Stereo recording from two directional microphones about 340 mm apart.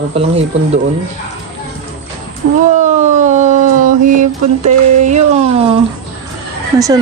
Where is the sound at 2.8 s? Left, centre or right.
Right.